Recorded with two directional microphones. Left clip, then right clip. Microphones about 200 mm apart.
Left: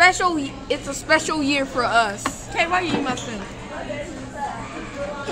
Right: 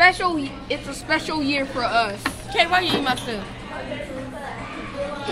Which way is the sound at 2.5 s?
20° right (ahead or behind).